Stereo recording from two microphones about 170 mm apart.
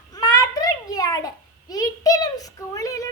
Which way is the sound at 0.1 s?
20° left (ahead or behind).